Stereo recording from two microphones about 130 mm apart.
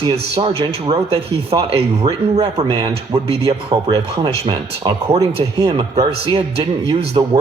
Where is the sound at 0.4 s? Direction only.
40° right (ahead or behind).